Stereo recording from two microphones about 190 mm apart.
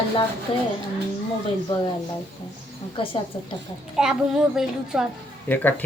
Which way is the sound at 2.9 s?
25° left (ahead or behind).